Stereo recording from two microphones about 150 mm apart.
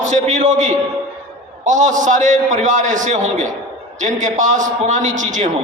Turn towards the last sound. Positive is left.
turn(degrees=-55)  # may be behind; listen again after turning